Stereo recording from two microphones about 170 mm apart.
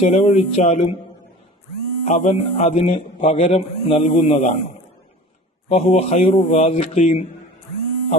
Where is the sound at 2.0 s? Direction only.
40° left (ahead or behind).